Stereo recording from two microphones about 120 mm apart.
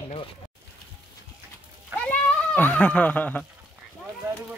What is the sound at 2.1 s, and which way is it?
Speech, 15° left (ahead or behind).